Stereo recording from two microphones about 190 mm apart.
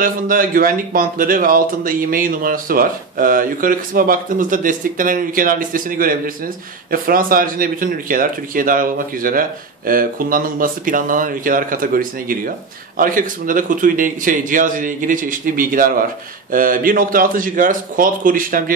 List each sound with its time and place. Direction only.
0.0 s speech: 45° right (ahead or behind)